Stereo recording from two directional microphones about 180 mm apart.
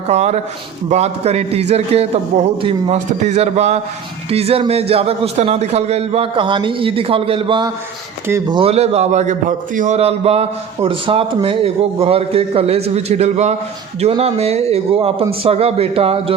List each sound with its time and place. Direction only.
0.1 s a man's voice: 40° right (ahead or behind)